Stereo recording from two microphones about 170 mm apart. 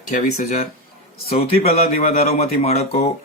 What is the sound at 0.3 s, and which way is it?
Speech, 40° left (ahead or behind).